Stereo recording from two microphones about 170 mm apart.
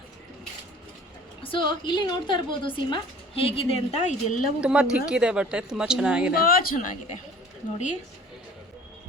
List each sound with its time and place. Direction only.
1.4 s a woman's voice: 30° left (ahead or behind); by 4.4 s 45° left (ahead or behind)
4.6 s speech: 5° right (ahead or behind)
6.3 s speech: 60° left (ahead or behind)